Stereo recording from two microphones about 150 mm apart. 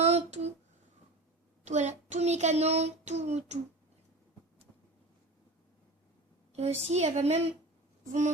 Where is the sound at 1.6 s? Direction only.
50° right (ahead or behind).